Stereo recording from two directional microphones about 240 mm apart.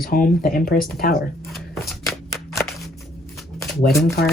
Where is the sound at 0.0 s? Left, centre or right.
Left.